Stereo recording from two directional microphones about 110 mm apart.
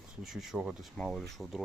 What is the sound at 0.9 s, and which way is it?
Speech, 5° left (ahead or behind).